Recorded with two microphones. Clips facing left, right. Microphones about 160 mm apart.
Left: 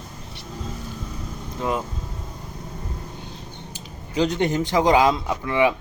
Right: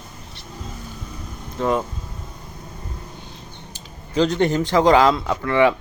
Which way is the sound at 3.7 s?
15° left (ahead or behind).